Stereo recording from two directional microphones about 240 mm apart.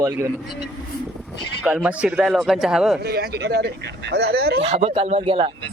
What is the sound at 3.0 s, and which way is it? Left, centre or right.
Speech, right.